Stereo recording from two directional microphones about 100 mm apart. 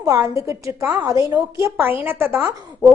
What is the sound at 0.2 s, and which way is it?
Speech, 30° right (ahead or behind).